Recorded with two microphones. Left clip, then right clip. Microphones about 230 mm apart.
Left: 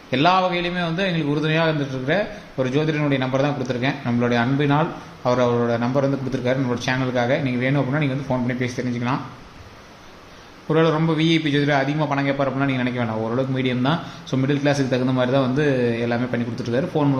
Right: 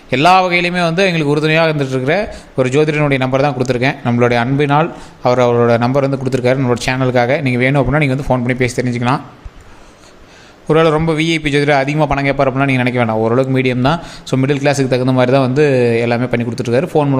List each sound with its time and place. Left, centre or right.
0.1 s a man's voice: right
10.7 s a man's voice: right